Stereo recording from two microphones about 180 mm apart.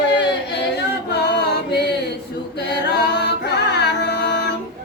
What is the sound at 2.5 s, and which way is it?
A capella, 70° left (ahead or behind).